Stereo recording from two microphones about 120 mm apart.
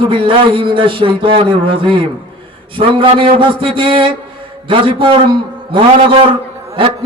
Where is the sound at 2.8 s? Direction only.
45° right (ahead or behind).